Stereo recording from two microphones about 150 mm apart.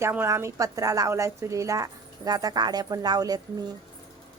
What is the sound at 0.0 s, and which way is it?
A woman's voice, 15° right (ahead or behind).